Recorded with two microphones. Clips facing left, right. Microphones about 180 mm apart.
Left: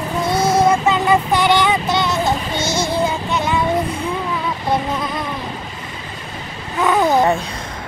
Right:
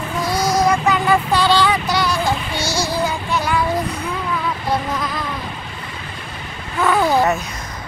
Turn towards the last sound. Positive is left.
turn(degrees=20)  # may be behind; listen again after turning